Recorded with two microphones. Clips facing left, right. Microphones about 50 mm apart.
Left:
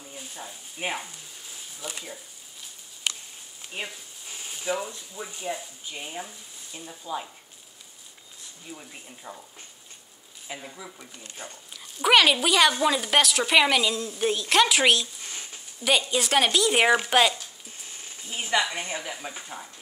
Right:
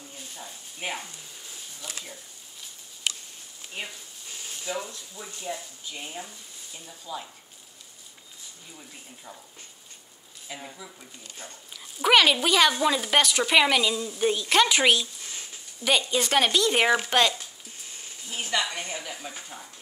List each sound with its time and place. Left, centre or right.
0.1 s frying: centre
3.7 s speech: centre
4.3 s speech: centre
8.7 s speech: left
10.5 s speech: left
11.7 s speech: centre
18.3 s a woman's voice: centre